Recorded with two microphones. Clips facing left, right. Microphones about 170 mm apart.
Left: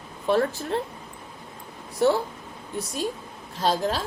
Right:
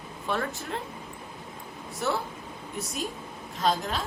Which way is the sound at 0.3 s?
35° left (ahead or behind).